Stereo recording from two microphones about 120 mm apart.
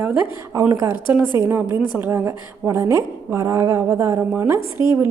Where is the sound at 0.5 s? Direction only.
25° right (ahead or behind).